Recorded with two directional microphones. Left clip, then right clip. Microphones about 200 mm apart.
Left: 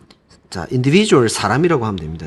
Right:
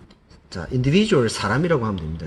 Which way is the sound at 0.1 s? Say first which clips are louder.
Left 6 dB; 50° left (ahead or behind).